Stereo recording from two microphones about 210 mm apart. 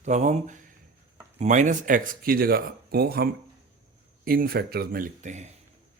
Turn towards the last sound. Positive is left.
turn(degrees=-35)  # may be behind; listen again after turning